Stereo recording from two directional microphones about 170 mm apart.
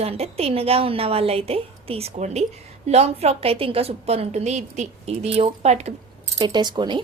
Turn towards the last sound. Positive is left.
turn(degrees=-25)  # may be behind; listen again after turning